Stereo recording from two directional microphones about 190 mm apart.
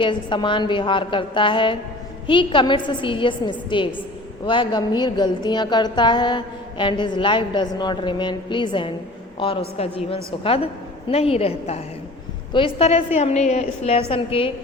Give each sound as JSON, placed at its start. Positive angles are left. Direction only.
{"t": 0.0, "sound": "a woman's voice", "side_deg": 25}